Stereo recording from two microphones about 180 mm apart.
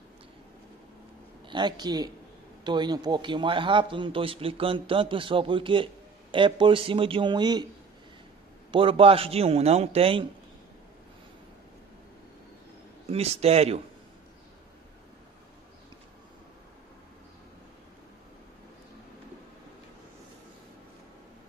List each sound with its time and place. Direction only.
1.5 s a man's voice: 25° right (ahead or behind)
8.7 s a man's voice: 30° right (ahead or behind)
13.1 s a man's voice: 35° right (ahead or behind)